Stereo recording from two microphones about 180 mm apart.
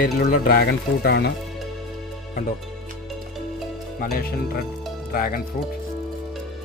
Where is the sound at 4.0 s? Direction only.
55° left (ahead or behind).